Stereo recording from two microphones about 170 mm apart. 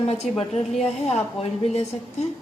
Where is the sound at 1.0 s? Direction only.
40° left (ahead or behind).